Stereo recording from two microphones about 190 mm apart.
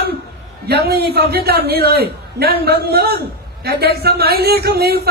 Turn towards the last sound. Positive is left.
turn(degrees=-55)  # may be behind; listen again after turning